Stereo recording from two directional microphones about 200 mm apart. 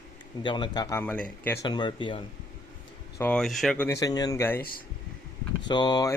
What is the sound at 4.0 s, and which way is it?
Speech, 20° left (ahead or behind).